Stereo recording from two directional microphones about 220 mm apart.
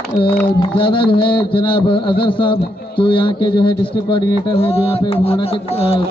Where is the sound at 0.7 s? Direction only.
20° left (ahead or behind).